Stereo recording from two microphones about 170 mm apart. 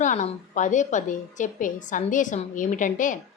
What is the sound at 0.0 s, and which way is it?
A woman's voice, 45° left (ahead or behind).